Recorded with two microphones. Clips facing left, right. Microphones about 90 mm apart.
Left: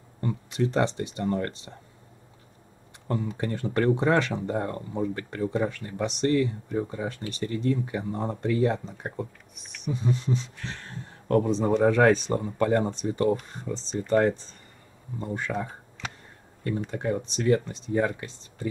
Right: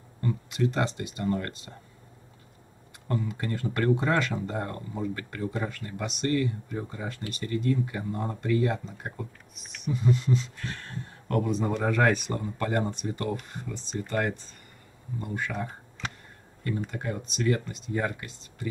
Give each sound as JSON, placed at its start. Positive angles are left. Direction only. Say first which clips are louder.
{"t": 0.2, "sound": "speech", "louder": "left 1 dB", "side_deg": 30}
{"t": 3.1, "sound": "speech", "louder": "left 2 dB", "side_deg": 25}
{"t": 16.6, "sound": "speech", "louder": "left 4 dB", "side_deg": 25}